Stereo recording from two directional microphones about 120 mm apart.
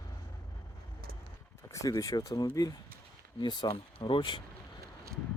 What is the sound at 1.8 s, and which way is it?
Speech, 30° left (ahead or behind).